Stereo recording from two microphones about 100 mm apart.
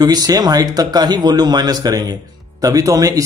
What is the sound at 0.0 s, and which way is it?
A man's voice, 40° right (ahead or behind).